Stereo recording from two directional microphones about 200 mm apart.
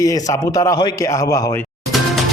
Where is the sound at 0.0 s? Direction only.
15° left (ahead or behind).